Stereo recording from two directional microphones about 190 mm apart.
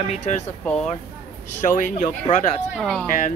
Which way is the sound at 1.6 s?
45° left (ahead or behind).